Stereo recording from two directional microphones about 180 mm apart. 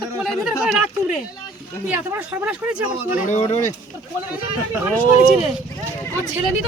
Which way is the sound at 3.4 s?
40° left (ahead or behind).